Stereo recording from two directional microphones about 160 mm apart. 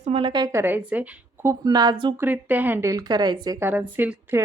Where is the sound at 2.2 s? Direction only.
10° right (ahead or behind); by 3.5 s 25° right (ahead or behind).